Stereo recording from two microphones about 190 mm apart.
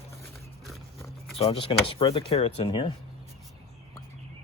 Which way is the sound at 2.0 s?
25° left (ahead or behind).